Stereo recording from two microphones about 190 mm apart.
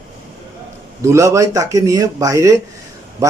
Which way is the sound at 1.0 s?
15° right (ahead or behind).